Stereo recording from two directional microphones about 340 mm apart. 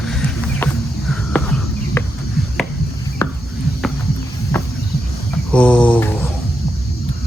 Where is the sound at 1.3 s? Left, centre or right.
Centre.